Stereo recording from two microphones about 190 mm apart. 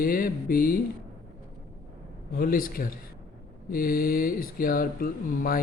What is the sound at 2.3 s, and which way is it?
Speech, 50° left (ahead or behind).